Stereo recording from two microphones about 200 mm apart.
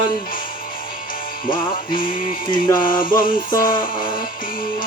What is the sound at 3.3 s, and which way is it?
Music, 25° left (ahead or behind).